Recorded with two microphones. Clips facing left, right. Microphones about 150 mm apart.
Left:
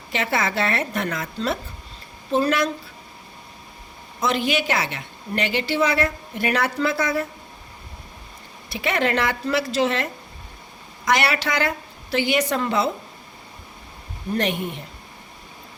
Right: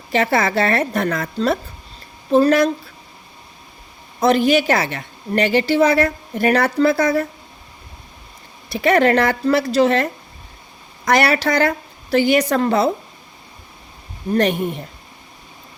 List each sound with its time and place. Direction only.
0.1 s a woman's voice: 40° right (ahead or behind)
4.2 s a woman's voice: 40° right (ahead or behind)
8.7 s a woman's voice: 40° right (ahead or behind)
14.3 s a woman's voice: 40° right (ahead or behind)